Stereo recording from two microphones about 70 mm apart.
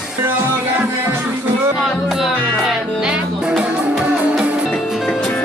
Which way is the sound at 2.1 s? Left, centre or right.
Centre.